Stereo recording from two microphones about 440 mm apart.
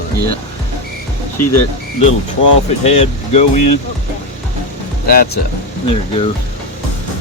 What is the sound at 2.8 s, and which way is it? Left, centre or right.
Speech, centre.